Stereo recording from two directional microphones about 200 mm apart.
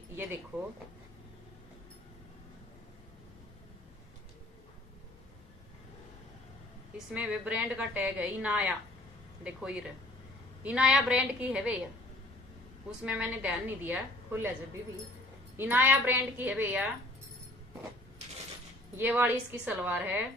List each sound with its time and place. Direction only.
0.1 s speech: 10° right (ahead or behind)
7.2 s a woman's voice: 5° right (ahead or behind)
13.0 s a woman's voice: 5° right (ahead or behind)
15.5 s a woman's voice: 10° right (ahead or behind)
18.9 s a woman's voice: 10° right (ahead or behind)